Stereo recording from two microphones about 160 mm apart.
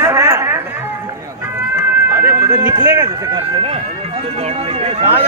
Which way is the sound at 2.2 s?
20° right (ahead or behind).